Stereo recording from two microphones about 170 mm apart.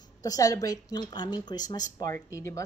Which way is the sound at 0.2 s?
20° left (ahead or behind).